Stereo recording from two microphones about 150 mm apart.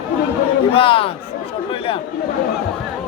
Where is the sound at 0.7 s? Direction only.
40° left (ahead or behind).